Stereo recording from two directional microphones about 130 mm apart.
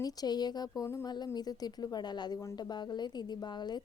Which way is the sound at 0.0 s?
30° left (ahead or behind).